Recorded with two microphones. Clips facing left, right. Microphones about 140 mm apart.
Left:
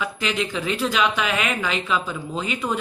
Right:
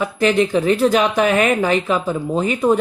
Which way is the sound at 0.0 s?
45° right (ahead or behind).